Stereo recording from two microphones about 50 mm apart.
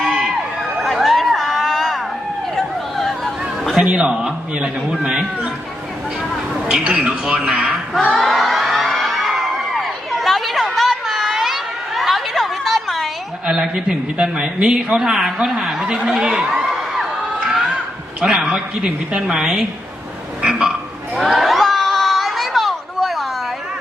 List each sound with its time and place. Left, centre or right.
0.8 s a sound: centre
2.6 s chatter: centre
3.8 s a man's voice: right
6.8 s a man's voice: centre
8.1 s crowd: centre
11.3 s a sound: centre
13.5 s a woman's voice: centre
16.6 s crowd: centre
18.2 s a woman's voice: centre
20.5 s a sound: centre
21.2 s crowd: centre